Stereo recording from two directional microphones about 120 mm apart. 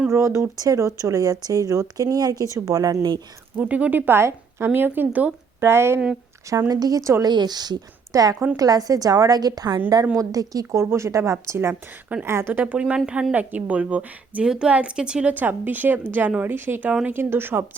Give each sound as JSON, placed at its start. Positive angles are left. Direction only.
{"t": 0.1, "sound": "speech", "side_deg": -25}
{"t": 3.6, "sound": "a woman's voice", "side_deg": -10}